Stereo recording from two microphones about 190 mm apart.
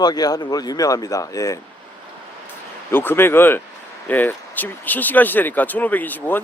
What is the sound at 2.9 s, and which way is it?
Speech, 10° left (ahead or behind).